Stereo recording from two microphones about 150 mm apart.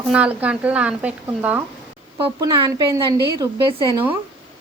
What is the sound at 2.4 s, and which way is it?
A woman's voice, 25° right (ahead or behind).